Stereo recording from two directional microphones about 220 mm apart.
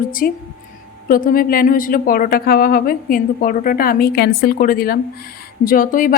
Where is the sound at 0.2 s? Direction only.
40° left (ahead or behind).